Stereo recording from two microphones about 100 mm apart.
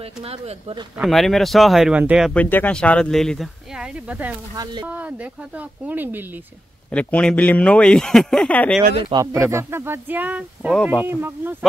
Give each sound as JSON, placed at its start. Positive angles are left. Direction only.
{"t": 1.0, "sound": "speech", "side_deg": 0}
{"t": 2.0, "sound": "speech", "side_deg": -15}
{"t": 2.3, "sound": "speech", "side_deg": 15}
{"t": 6.9, "sound": "speech", "side_deg": 10}
{"t": 9.4, "sound": "speech", "side_deg": -25}
{"t": 10.7, "sound": "speech", "side_deg": 0}
{"t": 11.1, "sound": "speech", "side_deg": -20}